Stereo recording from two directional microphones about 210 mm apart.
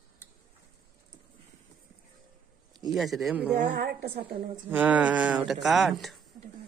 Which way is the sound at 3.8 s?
45° right (ahead or behind).